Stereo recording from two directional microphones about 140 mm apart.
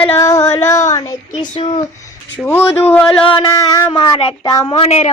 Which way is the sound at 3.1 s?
40° left (ahead or behind).